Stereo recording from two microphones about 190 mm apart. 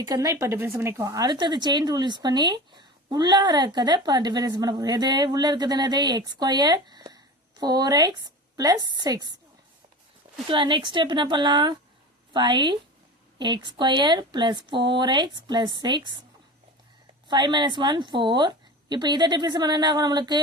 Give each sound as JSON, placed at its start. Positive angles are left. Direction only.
{"t": 0.0, "sound": "speech", "side_deg": -20}
{"t": 10.5, "sound": "speech", "side_deg": -25}
{"t": 17.2, "sound": "speech", "side_deg": -25}